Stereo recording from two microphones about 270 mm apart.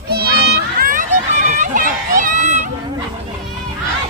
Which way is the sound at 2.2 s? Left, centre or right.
Right.